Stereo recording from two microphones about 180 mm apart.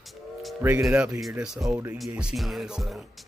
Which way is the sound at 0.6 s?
15° right (ahead or behind).